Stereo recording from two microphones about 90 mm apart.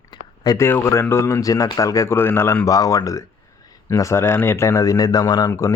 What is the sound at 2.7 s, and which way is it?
Speech, 40° left (ahead or behind).